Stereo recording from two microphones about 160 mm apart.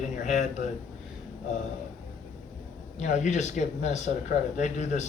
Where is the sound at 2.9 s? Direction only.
50° left (ahead or behind).